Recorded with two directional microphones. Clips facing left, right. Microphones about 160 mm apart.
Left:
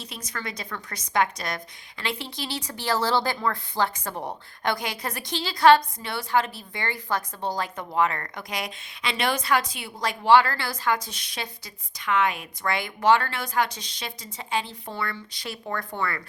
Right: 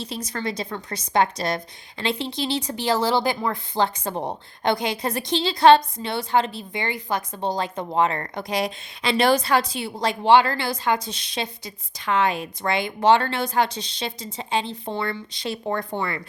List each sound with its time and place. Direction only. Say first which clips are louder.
0.3 s a woman's voice: right 4 dB; 30° right (ahead or behind)